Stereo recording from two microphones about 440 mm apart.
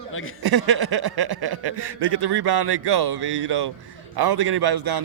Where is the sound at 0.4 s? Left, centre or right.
Right.